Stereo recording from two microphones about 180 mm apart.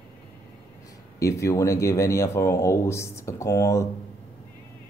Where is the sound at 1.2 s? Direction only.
15° left (ahead or behind).